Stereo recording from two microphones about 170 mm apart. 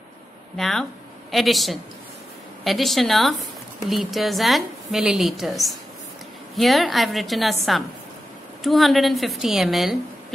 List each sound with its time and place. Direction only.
0.6 s a woman's voice: 5° left (ahead or behind)
8.6 s a woman's voice: centre (ahead or behind)